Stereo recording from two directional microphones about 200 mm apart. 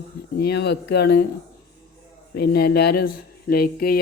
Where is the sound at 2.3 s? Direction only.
50° left (ahead or behind).